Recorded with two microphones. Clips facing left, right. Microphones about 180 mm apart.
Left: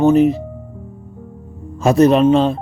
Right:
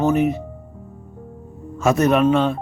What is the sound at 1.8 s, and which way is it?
Speech, 35° left (ahead or behind).